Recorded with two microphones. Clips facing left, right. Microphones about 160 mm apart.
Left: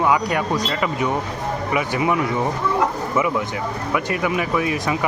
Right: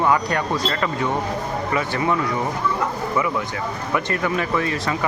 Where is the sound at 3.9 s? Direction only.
10° left (ahead or behind).